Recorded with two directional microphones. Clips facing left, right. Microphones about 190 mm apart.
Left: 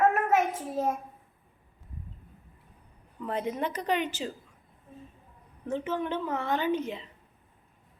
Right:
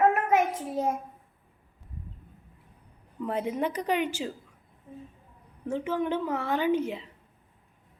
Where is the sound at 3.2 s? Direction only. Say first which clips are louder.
Right 2 dB; 10° right (ahead or behind).